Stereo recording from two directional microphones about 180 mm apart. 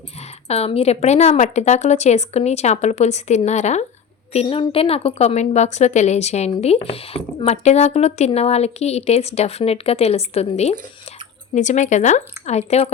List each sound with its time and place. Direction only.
0.2 s a woman's voice: 35° left (ahead or behind)